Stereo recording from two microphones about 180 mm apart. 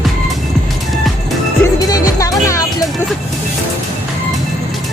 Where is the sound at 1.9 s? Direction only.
20° left (ahead or behind).